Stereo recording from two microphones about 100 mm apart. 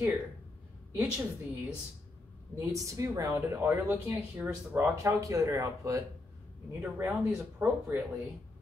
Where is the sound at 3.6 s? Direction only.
20° right (ahead or behind).